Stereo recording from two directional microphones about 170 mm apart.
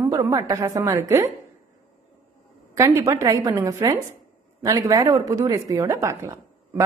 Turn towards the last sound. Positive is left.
turn(degrees=-15)  # may be behind; listen again after turning